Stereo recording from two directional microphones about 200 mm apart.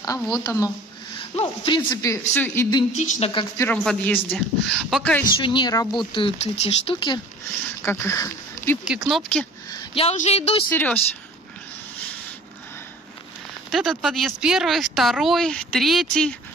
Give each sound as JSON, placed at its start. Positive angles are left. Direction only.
{"t": 0.0, "sound": "speech", "side_deg": 15}
{"t": 1.3, "sound": "speech", "side_deg": 30}
{"t": 3.0, "sound": "speech", "side_deg": 35}
{"t": 3.3, "sound": "speech", "side_deg": 25}
{"t": 3.6, "sound": "speech", "side_deg": 5}
{"t": 5.4, "sound": "speech", "side_deg": 25}
{"t": 7.8, "sound": "speech", "side_deg": 15}
{"t": 8.8, "sound": "speech", "side_deg": -5}
{"t": 9.7, "sound": "speech", "side_deg": 30}
{"t": 10.7, "sound": "speech", "side_deg": 10}
{"t": 13.7, "sound": "speech", "side_deg": 0}